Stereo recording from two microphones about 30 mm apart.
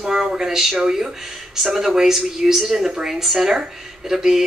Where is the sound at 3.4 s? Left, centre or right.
Centre.